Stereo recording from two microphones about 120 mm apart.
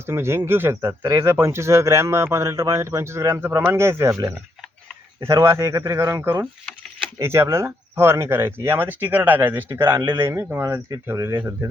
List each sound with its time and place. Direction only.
0.0 s speech: 20° right (ahead or behind)
5.2 s speech: 25° right (ahead or behind)